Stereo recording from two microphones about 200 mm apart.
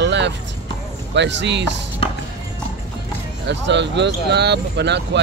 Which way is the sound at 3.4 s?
60° right (ahead or behind).